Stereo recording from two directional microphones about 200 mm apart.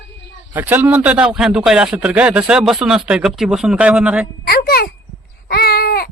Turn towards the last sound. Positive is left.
turn(degrees=50)  # may be behind; listen again after turning